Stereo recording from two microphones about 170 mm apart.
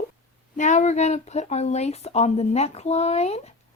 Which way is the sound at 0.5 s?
45° left (ahead or behind).